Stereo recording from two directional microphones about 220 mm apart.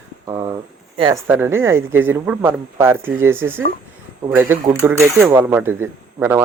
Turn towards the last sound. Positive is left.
turn(degrees=-10)  # may be behind; listen again after turning